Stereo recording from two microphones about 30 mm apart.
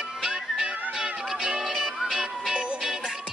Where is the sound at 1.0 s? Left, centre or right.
Right.